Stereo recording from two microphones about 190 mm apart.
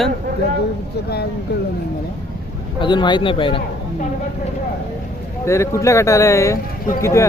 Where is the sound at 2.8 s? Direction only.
25° left (ahead or behind).